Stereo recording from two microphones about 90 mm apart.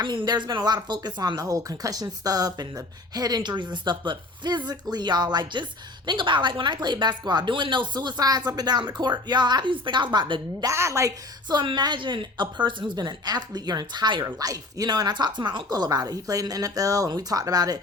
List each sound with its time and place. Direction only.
0.0 s a woman's voice: 60° right (ahead or behind)
6.1 s speech: 65° right (ahead or behind)
10.6 s a woman's voice: 35° right (ahead or behind)
11.4 s a woman's voice: 55° right (ahead or behind)